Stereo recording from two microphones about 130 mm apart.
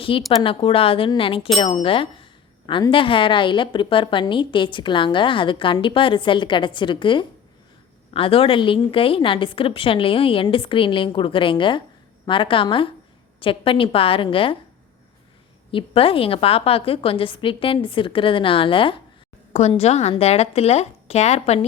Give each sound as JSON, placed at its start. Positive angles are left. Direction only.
{"t": 0.1, "sound": "a woman's voice", "side_deg": 45}
{"t": 15.7, "sound": "a woman's voice", "side_deg": 45}
{"t": 19.5, "sound": "a woman's voice", "side_deg": 55}